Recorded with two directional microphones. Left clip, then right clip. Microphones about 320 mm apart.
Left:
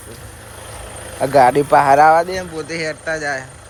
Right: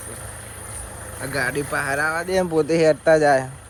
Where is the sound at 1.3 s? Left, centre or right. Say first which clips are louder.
Left 13 dB; centre.